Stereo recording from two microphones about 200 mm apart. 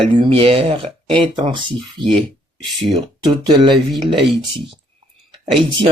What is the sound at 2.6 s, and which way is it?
Speech, centre (ahead or behind).